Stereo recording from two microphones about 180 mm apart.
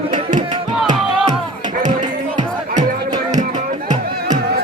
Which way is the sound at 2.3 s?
45° right (ahead or behind).